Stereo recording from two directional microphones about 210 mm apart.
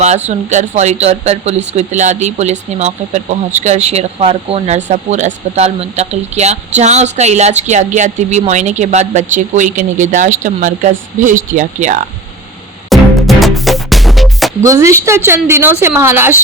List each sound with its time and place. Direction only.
0.0 s speech: 35° right (ahead or behind)
12.9 s music: centre (ahead or behind)
14.6 s a woman's voice: 15° right (ahead or behind)